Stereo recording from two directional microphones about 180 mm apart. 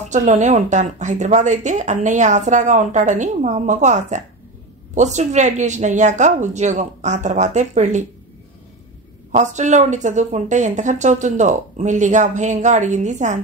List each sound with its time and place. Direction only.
0.0 s speech: 40° right (ahead or behind)
9.3 s speech: 40° right (ahead or behind)